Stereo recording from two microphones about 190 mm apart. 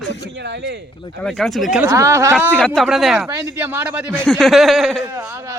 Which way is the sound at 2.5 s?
Centre (ahead or behind).